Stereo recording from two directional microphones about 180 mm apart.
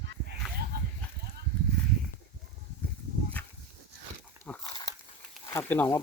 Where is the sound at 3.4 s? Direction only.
10° left (ahead or behind).